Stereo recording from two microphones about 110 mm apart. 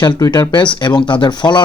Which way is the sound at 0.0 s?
40° left (ahead or behind).